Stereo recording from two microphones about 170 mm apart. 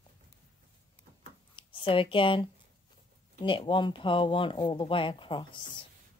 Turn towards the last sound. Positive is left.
turn(degrees=30)  # may be behind; listen again after turning